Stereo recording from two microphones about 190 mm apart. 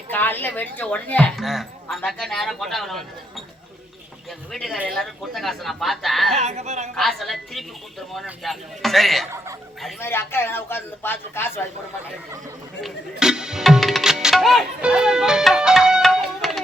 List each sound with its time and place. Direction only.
0.1 s a woman's voice: 10° left (ahead or behind)
6.3 s speech: 35° right (ahead or behind)
6.9 s a woman's voice: centre (ahead or behind)
10.0 s speech: 10° left (ahead or behind)
12.8 s music: 5° right (ahead or behind)